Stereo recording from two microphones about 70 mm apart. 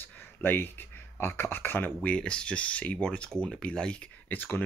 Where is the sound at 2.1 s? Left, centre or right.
Centre.